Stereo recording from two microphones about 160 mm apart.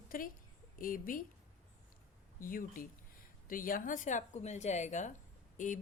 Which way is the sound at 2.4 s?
60° left (ahead or behind).